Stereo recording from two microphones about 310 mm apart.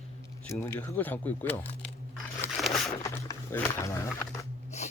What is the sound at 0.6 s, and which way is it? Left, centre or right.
Speech, centre.